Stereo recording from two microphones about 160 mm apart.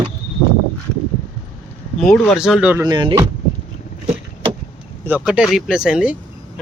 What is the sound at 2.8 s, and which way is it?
Speech, 30° right (ahead or behind).